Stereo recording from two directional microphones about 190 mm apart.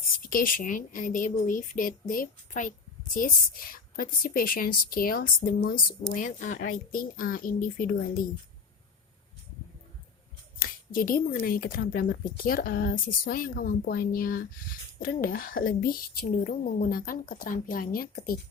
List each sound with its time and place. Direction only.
0.2 s speech: 45° left (ahead or behind)
10.6 s speech: 50° left (ahead or behind)